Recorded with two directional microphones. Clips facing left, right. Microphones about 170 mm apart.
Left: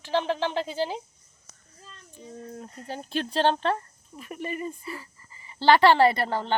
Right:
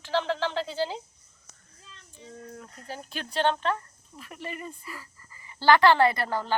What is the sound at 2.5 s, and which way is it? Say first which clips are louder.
A woman's voice: left 4 dB; 25° left (ahead or behind).